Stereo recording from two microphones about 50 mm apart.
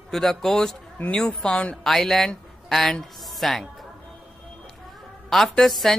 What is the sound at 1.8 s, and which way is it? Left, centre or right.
A man's voice, centre.